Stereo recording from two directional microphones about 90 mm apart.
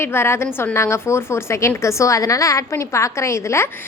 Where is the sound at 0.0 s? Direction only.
25° left (ahead or behind).